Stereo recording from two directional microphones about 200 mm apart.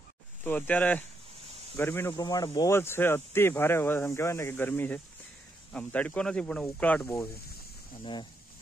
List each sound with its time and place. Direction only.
0.4 s speech: 10° left (ahead or behind)
8.0 s speech: 25° left (ahead or behind)